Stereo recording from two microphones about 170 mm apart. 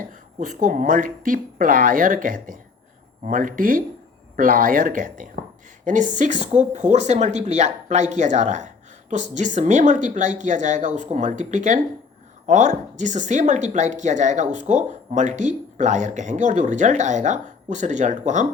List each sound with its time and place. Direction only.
0.0 s a woman's voice: 50° right (ahead or behind)